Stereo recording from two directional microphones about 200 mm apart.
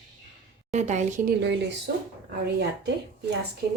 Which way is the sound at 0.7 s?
35° right (ahead or behind).